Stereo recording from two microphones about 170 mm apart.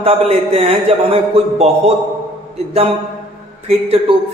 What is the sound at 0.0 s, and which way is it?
Speech, 35° right (ahead or behind).